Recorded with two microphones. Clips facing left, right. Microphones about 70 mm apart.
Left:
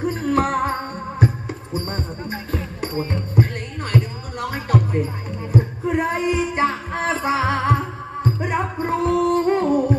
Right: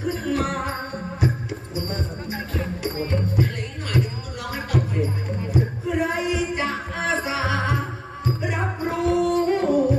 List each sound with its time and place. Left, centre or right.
0.0 s music: left